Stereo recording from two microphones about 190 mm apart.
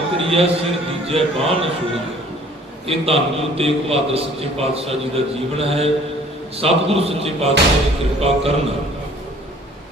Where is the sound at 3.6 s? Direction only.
30° right (ahead or behind).